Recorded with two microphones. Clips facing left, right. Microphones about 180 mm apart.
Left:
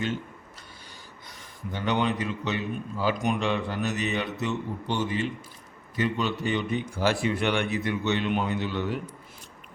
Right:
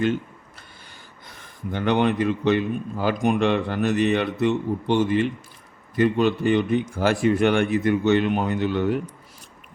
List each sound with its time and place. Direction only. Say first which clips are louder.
1.7 s a man's voice: right 6 dB; 60° right (ahead or behind)